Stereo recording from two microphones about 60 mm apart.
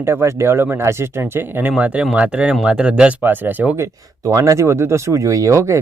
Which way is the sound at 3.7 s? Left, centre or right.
Right.